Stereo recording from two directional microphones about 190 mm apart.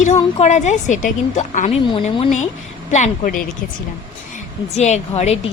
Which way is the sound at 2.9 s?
40° left (ahead or behind).